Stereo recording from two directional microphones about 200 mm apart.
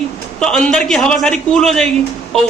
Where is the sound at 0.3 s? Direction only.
5° left (ahead or behind).